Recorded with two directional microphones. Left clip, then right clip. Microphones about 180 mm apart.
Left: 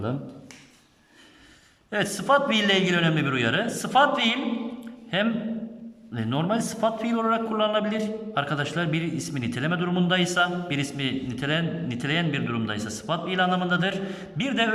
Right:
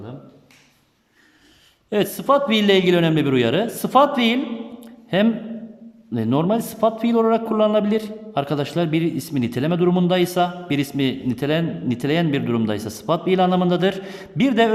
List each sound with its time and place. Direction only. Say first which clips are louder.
1.9 s a man's voice: right 4 dB; 20° right (ahead or behind)
4.8 s a sound: right 8 dB; 30° right (ahead or behind)
6.1 s a man's voice: right 6 dB; 25° right (ahead or behind)